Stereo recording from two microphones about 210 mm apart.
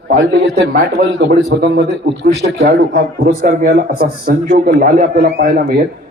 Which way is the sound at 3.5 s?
35° right (ahead or behind).